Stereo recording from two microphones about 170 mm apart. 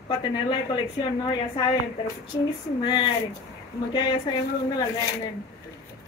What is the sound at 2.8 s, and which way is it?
A woman's voice, 25° left (ahead or behind).